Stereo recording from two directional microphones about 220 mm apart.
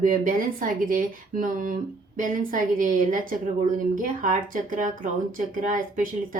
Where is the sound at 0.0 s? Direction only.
40° right (ahead or behind).